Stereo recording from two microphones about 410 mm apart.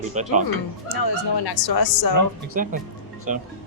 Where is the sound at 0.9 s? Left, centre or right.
Left.